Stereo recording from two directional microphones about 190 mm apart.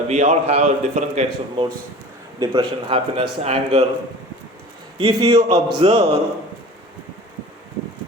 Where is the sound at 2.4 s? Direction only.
20° right (ahead or behind).